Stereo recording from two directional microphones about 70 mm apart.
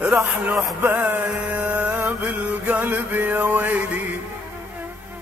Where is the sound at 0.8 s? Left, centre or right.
Right.